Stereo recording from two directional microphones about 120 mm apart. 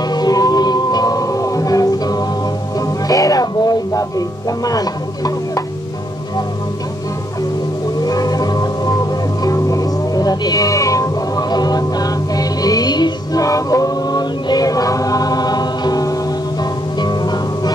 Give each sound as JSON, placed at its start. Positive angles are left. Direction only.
{"t": 0.1, "sound": "music", "side_deg": 35}
{"t": 3.1, "sound": "a sound", "side_deg": 30}
{"t": 4.5, "sound": "music", "side_deg": 30}
{"t": 8.0, "sound": "music", "side_deg": 30}
{"t": 9.4, "sound": "cat", "side_deg": 30}
{"t": 17.0, "sound": "music", "side_deg": 35}